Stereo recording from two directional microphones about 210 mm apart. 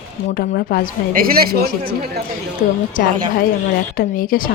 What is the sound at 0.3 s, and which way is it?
Speech, 45° left (ahead or behind).